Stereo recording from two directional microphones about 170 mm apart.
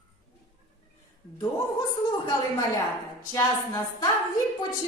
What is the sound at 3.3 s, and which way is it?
Speech, 20° left (ahead or behind).